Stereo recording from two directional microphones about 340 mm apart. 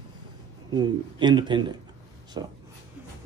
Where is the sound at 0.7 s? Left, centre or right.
Centre.